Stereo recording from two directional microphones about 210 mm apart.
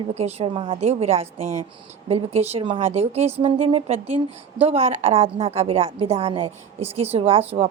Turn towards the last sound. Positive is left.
turn(degrees=-25)  # may be behind; listen again after turning